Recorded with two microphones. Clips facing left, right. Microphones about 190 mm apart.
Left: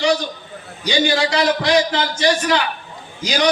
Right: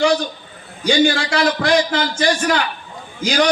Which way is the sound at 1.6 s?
50° right (ahead or behind).